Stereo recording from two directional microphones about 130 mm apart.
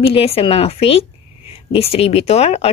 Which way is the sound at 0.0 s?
50° left (ahead or behind).